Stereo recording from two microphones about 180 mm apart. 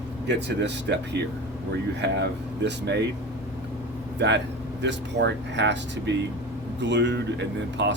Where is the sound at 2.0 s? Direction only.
70° right (ahead or behind).